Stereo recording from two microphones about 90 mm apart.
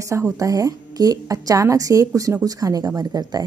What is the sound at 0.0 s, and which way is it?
A woman's voice, 35° right (ahead or behind).